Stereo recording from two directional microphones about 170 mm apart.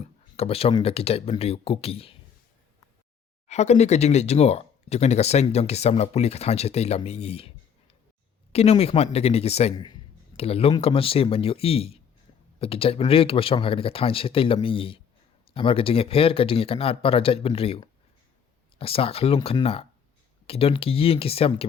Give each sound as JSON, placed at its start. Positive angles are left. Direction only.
{"t": 0.3, "sound": "speech", "side_deg": 35}
{"t": 3.4, "sound": "speech", "side_deg": 40}
{"t": 8.5, "sound": "speech", "side_deg": 35}
{"t": 9.7, "sound": "speech", "side_deg": 25}
{"t": 10.3, "sound": "speech", "side_deg": 35}